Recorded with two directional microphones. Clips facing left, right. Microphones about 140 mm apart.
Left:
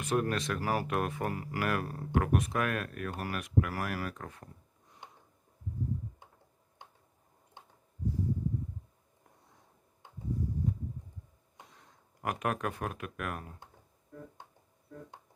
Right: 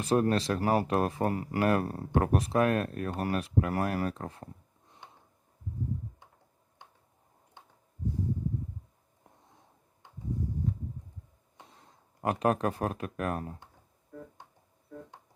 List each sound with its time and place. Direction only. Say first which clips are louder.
0.0 s speech: right 5 dB; 30° right (ahead or behind)
11.5 s speech: right 1 dB; 30° right (ahead or behind)